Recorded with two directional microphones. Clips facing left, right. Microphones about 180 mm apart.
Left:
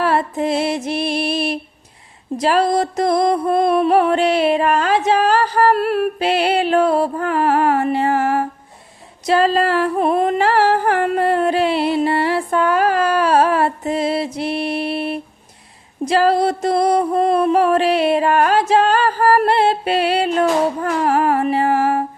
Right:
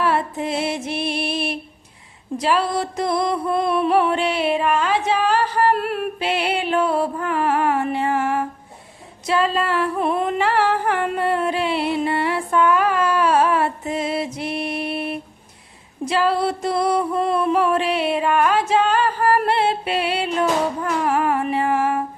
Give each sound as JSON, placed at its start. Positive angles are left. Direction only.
{"t": 0.0, "sound": "music", "side_deg": 40}
{"t": 9.2, "sound": "a sound", "side_deg": 40}
{"t": 20.8, "sound": "humming", "side_deg": 40}